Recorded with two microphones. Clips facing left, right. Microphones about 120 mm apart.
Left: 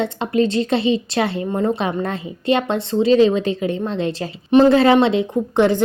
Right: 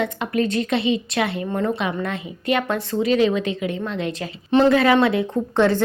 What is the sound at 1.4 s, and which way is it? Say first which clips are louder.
A woman's voice: left 3 dB; 20° left (ahead or behind).